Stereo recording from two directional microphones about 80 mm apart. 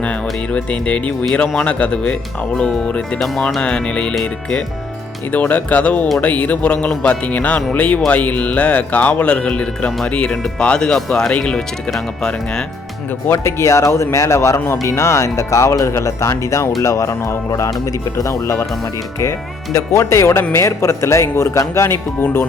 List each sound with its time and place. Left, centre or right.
0.0 s speech: centre
13.3 s speech: left